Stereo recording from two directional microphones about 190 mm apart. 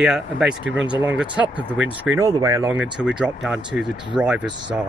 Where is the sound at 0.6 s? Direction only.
75° right (ahead or behind).